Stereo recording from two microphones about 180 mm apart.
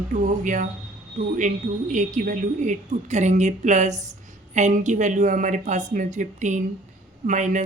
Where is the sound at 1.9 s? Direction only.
45° right (ahead or behind).